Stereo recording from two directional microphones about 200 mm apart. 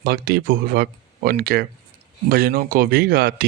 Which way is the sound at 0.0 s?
50° right (ahead or behind).